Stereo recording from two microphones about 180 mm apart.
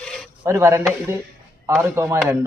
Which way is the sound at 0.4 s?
15° right (ahead or behind).